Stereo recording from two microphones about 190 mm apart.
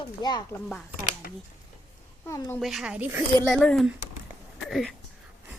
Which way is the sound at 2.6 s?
Centre (ahead or behind).